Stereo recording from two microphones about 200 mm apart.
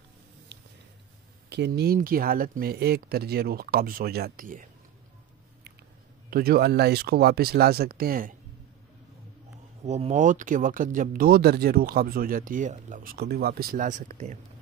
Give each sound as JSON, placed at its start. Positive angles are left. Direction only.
{"t": 1.5, "sound": "speech", "side_deg": -55}
{"t": 6.3, "sound": "speech", "side_deg": -50}
{"t": 9.8, "sound": "speech", "side_deg": -35}